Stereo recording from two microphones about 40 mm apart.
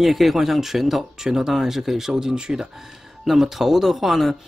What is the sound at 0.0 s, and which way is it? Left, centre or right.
Speech, centre.